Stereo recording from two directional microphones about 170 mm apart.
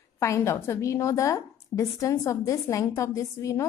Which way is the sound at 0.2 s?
15° left (ahead or behind).